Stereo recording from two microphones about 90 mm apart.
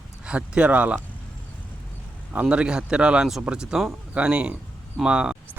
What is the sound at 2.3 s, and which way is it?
Speech, 10° right (ahead or behind).